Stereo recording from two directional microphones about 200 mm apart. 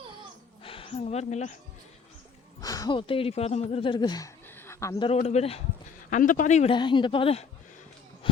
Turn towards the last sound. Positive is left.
turn(degrees=25)  # may be behind; listen again after turning